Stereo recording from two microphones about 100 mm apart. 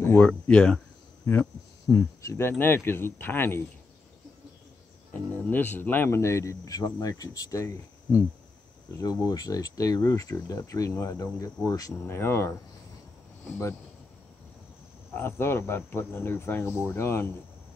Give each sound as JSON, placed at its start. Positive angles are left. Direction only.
{"t": 0.2, "sound": "speech", "side_deg": 10}
{"t": 1.3, "sound": "hum", "side_deg": 25}
{"t": 1.9, "sound": "speech", "side_deg": 35}
{"t": 5.1, "sound": "speech", "side_deg": 15}
{"t": 12.2, "sound": "speech", "side_deg": 25}
{"t": 15.1, "sound": "speech", "side_deg": 25}